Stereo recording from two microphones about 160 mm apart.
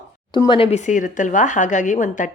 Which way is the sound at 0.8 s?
50° left (ahead or behind).